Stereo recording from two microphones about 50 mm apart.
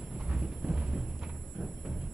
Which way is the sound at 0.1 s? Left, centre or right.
Right.